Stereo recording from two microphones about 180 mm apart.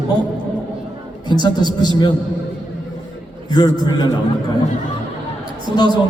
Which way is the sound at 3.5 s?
25° left (ahead or behind).